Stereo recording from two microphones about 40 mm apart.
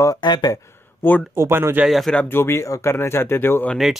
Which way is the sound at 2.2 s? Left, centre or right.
Left.